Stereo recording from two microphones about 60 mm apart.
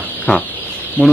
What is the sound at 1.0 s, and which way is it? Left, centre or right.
Speech, centre.